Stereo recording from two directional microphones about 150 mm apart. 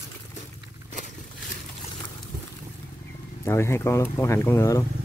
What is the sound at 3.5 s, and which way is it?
Speech, 15° left (ahead or behind).